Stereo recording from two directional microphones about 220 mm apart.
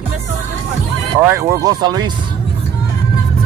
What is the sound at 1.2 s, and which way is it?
Speech, 15° right (ahead or behind).